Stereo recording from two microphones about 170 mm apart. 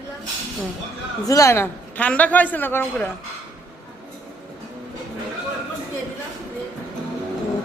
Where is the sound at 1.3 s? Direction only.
15° left (ahead or behind).